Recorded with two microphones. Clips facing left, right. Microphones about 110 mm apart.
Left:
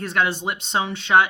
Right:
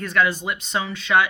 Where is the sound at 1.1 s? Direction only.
30° left (ahead or behind).